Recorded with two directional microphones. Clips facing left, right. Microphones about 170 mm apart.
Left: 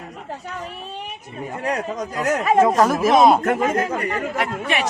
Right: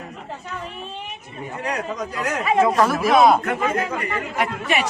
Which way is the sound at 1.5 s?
45° left (ahead or behind).